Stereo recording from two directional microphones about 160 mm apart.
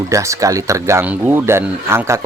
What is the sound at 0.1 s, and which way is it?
Speech, 20° right (ahead or behind).